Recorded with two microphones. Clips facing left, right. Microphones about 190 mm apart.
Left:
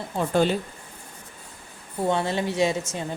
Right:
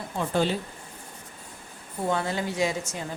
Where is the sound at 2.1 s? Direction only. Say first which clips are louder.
Left 3 dB; 25° left (ahead or behind).